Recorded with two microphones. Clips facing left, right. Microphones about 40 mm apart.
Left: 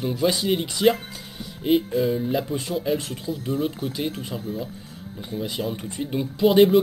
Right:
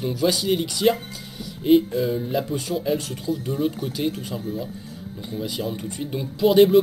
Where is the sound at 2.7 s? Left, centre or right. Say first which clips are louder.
Right 1 dB; centre.